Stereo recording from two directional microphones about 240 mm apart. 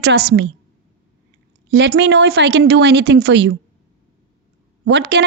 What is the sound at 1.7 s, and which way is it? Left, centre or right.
A woman's voice, right.